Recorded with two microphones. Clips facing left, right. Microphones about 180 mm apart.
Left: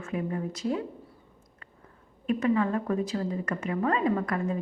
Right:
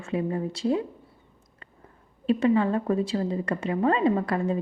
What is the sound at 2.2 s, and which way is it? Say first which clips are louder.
A woman's voice: right 3 dB; 30° right (ahead or behind).